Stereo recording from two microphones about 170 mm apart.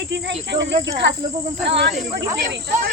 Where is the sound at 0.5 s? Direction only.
90° right.